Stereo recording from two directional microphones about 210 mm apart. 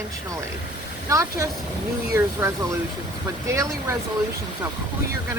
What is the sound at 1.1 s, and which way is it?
Speech, 15° right (ahead or behind).